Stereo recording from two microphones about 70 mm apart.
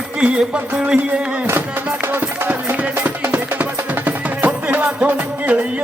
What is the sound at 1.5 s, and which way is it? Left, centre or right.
Music, right.